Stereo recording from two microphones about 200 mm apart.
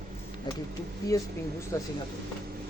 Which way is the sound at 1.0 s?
15° left (ahead or behind).